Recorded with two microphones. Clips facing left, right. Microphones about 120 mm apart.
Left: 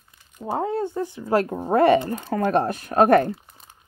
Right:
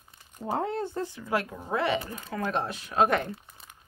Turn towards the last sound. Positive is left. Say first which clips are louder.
# left 8 dB
turn(degrees=50)  # may be behind; listen again after turning